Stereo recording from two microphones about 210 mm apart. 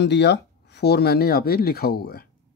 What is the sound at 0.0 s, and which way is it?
Speech, 55° left (ahead or behind).